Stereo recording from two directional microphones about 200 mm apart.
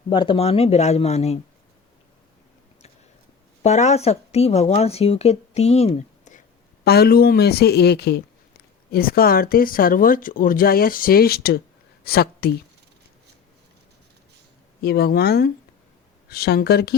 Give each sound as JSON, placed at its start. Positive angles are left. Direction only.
{"t": 0.1, "sound": "speech", "side_deg": 25}
{"t": 3.6, "sound": "speech", "side_deg": 35}
{"t": 6.8, "sound": "a woman's voice", "side_deg": 50}
{"t": 14.8, "sound": "speech", "side_deg": 55}